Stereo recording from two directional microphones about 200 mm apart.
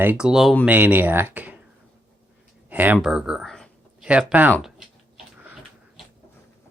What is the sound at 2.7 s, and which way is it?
Speech, 10° right (ahead or behind).